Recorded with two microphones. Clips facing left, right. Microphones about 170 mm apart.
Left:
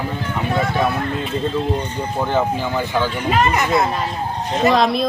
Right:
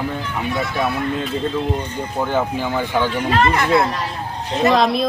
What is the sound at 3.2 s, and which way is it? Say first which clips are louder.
Speech: even; 10° left (ahead or behind).